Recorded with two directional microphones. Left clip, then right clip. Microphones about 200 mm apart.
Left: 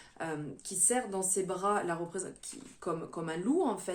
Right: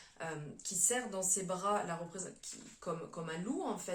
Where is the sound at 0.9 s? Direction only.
45° left (ahead or behind).